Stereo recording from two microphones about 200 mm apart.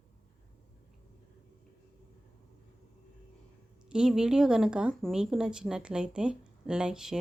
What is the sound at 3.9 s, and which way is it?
A woman's voice, 5° right (ahead or behind).